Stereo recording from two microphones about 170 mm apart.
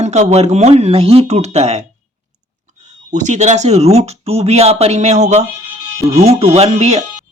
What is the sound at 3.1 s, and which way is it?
Speech, 45° right (ahead or behind).